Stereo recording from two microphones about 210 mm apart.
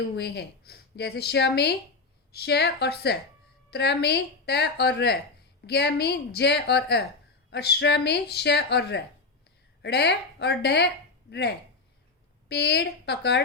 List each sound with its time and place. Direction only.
0.2 s speech: 50° left (ahead or behind)